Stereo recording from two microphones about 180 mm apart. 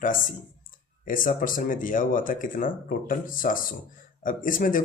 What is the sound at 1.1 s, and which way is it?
A man's voice, 50° left (ahead or behind).